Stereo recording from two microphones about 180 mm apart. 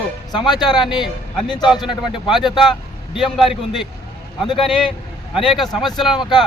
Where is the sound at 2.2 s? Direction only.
Centre (ahead or behind).